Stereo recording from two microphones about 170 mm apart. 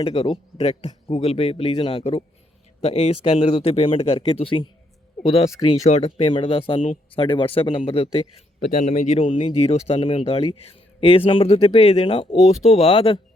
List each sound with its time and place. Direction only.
0.0 s speech: 35° left (ahead or behind)
5.9 s speech: 40° left (ahead or behind)